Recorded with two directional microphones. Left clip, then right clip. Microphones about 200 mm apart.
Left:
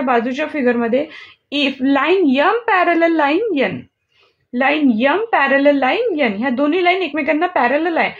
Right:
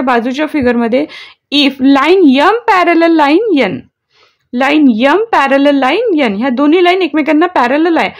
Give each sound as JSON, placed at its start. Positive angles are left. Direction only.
{"t": 0.0, "sound": "a woman's voice", "side_deg": -50}